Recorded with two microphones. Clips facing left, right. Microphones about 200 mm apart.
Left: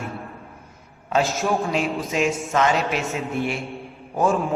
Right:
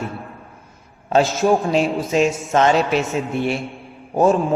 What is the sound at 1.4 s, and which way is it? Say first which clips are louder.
Speech: right 6 dB; 15° right (ahead or behind).